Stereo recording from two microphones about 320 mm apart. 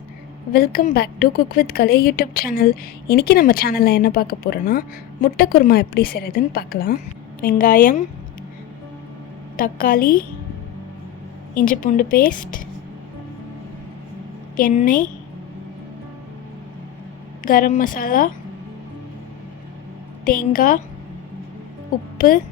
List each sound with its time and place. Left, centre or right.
0.5 s a woman's voice: left
9.6 s a woman's voice: left
11.5 s a woman's voice: left
14.5 s a woman's voice: left
17.4 s a woman's voice: left
20.2 s a woman's voice: left
22.2 s a woman's voice: left